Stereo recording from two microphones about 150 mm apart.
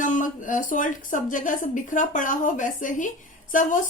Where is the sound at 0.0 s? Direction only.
60° left (ahead or behind).